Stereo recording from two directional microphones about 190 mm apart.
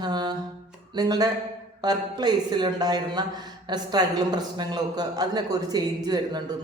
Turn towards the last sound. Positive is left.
turn(degrees=-20)  # may be behind; listen again after turning